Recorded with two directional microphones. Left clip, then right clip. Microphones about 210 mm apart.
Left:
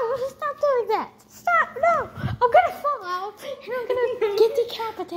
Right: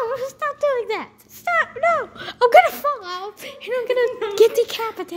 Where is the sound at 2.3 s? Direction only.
50° right (ahead or behind).